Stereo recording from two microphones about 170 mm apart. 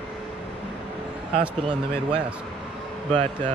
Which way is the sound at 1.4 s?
5° right (ahead or behind).